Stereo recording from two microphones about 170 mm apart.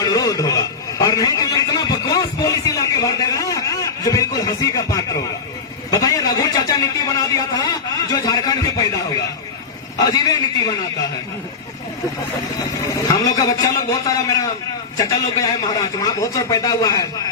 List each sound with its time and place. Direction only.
0.0 s a sound: 20° left (ahead or behind)
5.9 s a man's voice: 20° left (ahead or behind)
10.1 s a man's voice: 20° left (ahead or behind)
12.9 s a man's voice: 20° left (ahead or behind)